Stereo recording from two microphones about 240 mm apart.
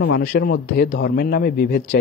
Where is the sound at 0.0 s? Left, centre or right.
Left.